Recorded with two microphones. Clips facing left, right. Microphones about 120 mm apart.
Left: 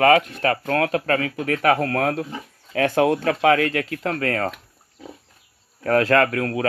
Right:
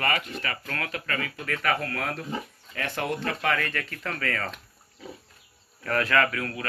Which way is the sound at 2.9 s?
85° left.